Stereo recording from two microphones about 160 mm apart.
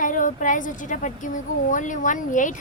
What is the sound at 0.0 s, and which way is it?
A woman's voice, 55° left (ahead or behind).